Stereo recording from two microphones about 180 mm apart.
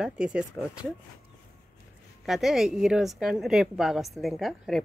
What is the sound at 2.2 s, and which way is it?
A woman's voice, centre (ahead or behind).